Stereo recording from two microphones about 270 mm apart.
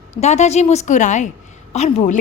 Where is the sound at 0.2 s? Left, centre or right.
Left.